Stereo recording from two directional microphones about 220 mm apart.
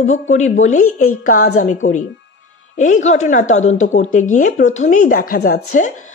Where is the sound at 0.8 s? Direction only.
80° left.